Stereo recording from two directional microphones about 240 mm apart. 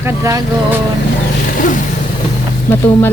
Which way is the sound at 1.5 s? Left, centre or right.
Left.